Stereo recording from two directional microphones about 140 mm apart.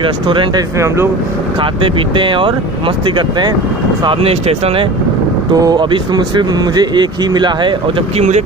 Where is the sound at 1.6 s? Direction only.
40° right (ahead or behind).